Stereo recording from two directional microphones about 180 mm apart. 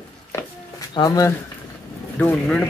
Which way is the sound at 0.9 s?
20° left (ahead or behind).